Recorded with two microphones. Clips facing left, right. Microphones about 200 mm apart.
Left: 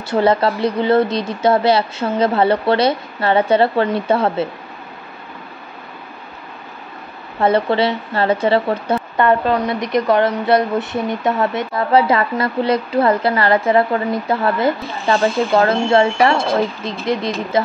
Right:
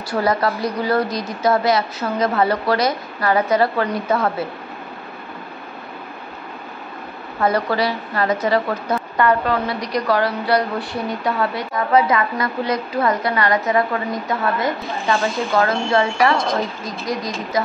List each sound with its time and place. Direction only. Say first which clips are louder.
0.1 s speech: left 4 dB; 25° left (ahead or behind)
7.3 s speech: left 4 dB; 25° left (ahead or behind)